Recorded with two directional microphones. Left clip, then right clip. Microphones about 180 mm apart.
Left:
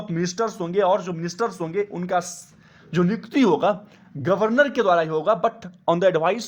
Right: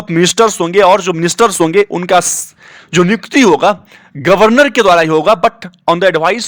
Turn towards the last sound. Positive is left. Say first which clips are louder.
# right 9 dB
turn(degrees=-15)  # may be behind; listen again after turning